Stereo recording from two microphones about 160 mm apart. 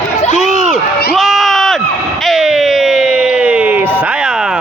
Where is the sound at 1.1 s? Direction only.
Centre (ahead or behind).